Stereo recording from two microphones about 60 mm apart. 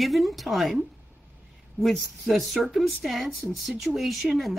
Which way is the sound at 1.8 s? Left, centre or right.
Centre.